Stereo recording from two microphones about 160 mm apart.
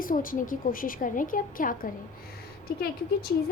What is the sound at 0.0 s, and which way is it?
A woman's voice, 60° left (ahead or behind).